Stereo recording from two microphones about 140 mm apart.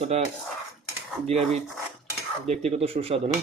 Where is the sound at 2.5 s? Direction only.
50° right (ahead or behind).